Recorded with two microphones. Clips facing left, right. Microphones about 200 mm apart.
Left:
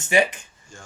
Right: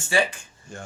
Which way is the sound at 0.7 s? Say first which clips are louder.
Right 7 dB; 60° right (ahead or behind).